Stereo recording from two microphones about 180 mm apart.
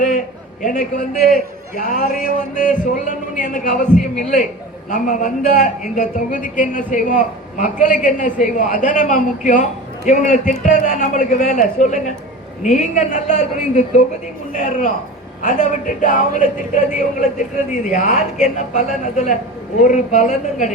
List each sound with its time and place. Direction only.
0.6 s a woman's voice: 45° left (ahead or behind)